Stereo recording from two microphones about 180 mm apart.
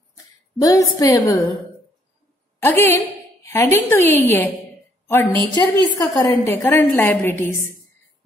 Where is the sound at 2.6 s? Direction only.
10° left (ahead or behind).